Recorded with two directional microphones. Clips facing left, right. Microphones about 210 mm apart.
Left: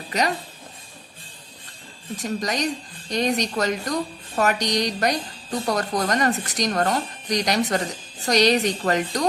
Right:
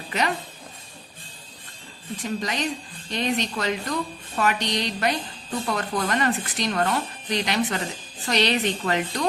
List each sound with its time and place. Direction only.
0.1 s speech: 40° left (ahead or behind)
2.1 s speech: 40° left (ahead or behind)